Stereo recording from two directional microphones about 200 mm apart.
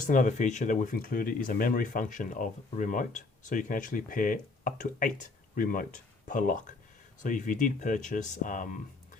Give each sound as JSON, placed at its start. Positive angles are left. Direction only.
{"t": 0.1, "sound": "speech", "side_deg": 40}